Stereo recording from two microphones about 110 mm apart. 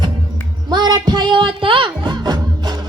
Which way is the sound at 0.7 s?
40° right (ahead or behind).